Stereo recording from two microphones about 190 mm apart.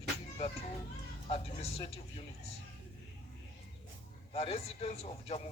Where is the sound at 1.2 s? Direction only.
30° left (ahead or behind).